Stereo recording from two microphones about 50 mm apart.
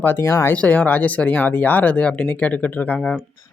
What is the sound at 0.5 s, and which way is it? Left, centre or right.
Speech, left.